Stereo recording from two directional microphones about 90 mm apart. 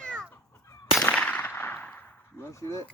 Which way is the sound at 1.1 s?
15° left (ahead or behind).